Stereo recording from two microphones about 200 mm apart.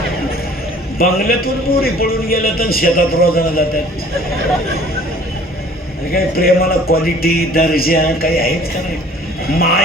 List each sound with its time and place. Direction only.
0.9 s a man's voice: 50° left (ahead or behind)
6.1 s a man's voice: 50° left (ahead or behind)